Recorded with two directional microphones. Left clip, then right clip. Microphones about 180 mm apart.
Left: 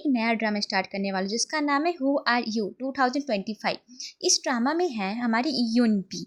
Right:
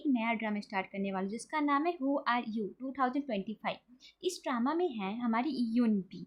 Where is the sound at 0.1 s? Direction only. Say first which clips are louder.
Left 8 dB; 35° left (ahead or behind).